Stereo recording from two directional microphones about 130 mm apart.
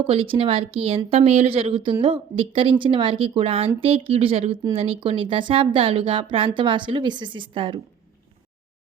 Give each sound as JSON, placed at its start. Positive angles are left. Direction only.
{"t": 0.0, "sound": "speech", "side_deg": -45}